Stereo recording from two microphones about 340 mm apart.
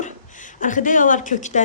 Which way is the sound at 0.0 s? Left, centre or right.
Left.